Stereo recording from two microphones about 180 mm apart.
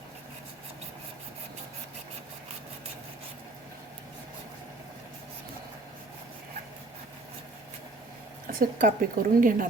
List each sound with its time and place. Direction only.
8.5 s a woman's voice: 50° right (ahead or behind)